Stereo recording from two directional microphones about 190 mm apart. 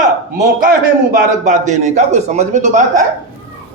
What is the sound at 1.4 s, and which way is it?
A man's voice, 40° right (ahead or behind).